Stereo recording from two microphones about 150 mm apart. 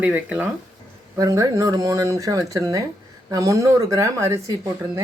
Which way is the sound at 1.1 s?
20° right (ahead or behind).